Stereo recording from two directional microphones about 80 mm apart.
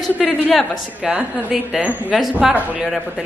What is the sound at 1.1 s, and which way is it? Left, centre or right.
Speech, centre.